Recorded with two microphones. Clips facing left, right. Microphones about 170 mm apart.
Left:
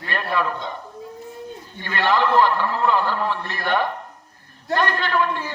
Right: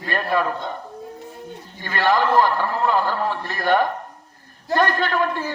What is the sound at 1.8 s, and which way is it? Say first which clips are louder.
A man's voice: right 1 dB; 45° right (ahead or behind).